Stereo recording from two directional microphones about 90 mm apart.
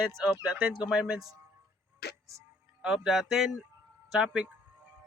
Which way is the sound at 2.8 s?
5° right (ahead or behind).